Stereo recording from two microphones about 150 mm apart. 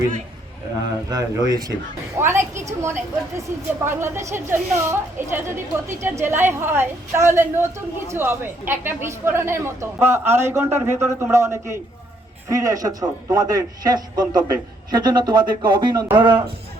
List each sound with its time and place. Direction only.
1.1 s a man's voice: 25° right (ahead or behind)